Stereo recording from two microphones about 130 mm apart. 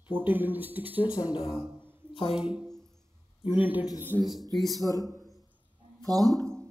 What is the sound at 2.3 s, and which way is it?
Speech, 5° right (ahead or behind).